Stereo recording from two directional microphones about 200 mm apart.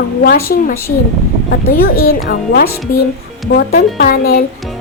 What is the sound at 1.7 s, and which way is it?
Speech, 50° left (ahead or behind).